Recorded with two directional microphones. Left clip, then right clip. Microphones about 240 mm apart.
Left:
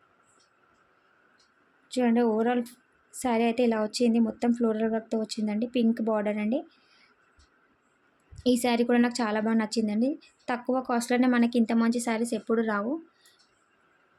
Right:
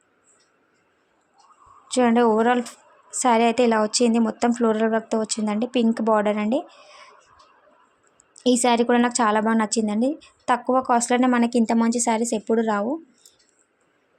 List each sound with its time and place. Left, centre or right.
1.9 s speech: centre
8.4 s speech: centre